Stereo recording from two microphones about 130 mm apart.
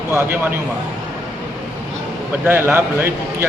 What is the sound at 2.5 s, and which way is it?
Speech, 15° right (ahead or behind).